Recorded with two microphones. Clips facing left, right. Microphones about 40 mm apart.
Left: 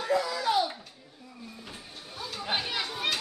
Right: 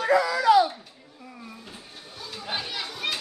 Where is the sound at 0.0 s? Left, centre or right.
Right.